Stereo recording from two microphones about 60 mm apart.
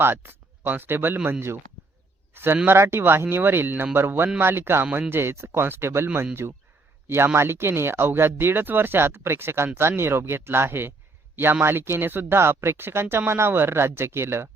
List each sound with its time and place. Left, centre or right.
0.0 s speech: right